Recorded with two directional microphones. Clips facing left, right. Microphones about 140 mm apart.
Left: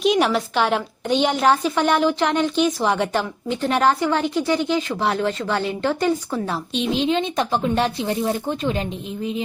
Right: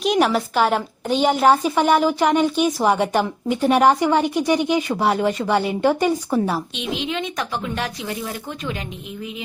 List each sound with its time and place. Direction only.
0.0 s a woman's voice: centre (ahead or behind)
6.7 s a woman's voice: 35° left (ahead or behind)